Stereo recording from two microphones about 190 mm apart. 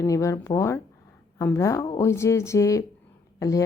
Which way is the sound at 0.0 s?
15° left (ahead or behind).